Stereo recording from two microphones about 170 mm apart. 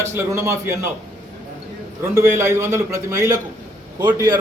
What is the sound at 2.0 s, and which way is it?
A man's voice, 15° right (ahead or behind).